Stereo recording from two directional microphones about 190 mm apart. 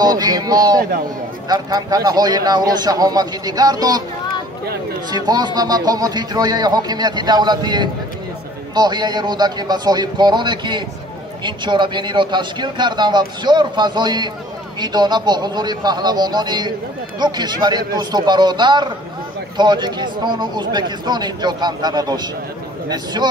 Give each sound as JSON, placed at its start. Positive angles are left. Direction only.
{"t": 0.0, "sound": "speech", "side_deg": -20}
{"t": 5.1, "sound": "speech", "side_deg": -20}